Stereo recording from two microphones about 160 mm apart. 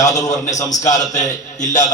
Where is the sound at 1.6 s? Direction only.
50° left (ahead or behind).